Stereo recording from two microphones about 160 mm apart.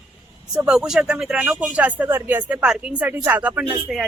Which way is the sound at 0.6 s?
5° right (ahead or behind).